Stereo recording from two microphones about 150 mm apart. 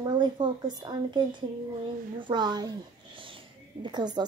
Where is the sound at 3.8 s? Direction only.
30° right (ahead or behind).